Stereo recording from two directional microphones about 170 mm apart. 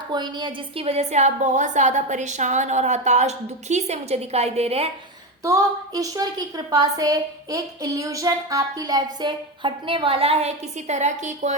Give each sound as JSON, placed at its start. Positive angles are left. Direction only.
{"t": 0.1, "sound": "a woman's voice", "side_deg": -25}
{"t": 5.4, "sound": "a woman's voice", "side_deg": -20}